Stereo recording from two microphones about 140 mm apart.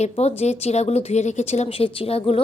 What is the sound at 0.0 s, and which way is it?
Speech, 50° left (ahead or behind).